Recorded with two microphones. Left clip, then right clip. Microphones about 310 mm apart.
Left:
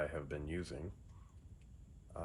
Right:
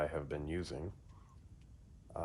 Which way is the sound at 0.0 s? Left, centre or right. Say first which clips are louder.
Right 3 dB; right.